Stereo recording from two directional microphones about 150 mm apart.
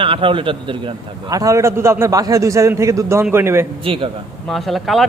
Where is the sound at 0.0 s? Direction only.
35° right (ahead or behind).